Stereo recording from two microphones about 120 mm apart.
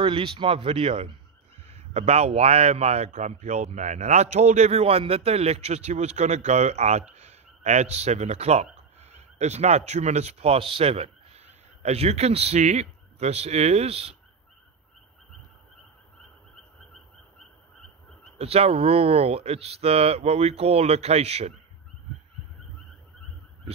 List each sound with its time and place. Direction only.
0.0 s a man's voice: 45° right (ahead or behind)
18.4 s speech: 55° right (ahead or behind)